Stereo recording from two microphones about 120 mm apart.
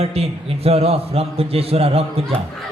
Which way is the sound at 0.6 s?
55° right (ahead or behind).